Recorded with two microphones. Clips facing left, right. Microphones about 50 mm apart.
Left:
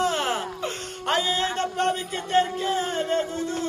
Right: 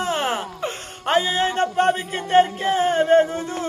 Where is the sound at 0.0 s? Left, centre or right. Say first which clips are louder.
Right 1 dB; centre.